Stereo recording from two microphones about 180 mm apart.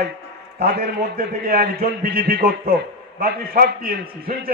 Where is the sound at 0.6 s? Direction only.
60° right (ahead or behind).